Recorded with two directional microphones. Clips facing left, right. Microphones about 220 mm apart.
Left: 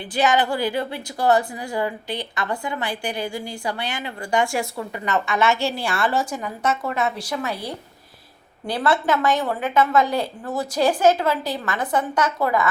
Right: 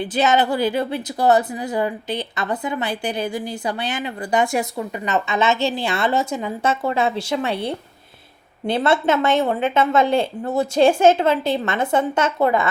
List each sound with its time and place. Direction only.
0.0 s a woman's voice: 20° right (ahead or behind)